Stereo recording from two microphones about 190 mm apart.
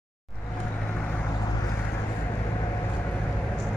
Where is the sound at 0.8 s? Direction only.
10° left (ahead or behind).